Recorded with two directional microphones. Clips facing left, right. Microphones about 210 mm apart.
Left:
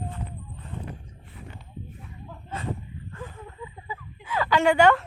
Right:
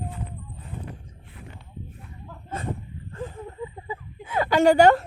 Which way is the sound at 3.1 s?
30° right (ahead or behind).